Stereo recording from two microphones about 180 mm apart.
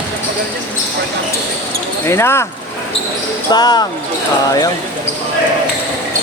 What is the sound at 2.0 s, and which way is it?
Speech, 15° left (ahead or behind).